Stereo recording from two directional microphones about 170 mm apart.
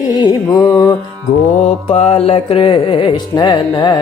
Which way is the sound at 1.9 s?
35° left (ahead or behind).